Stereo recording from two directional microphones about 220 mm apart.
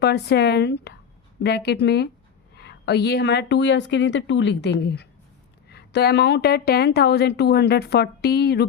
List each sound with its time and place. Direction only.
0.0 s speech: 50° left (ahead or behind)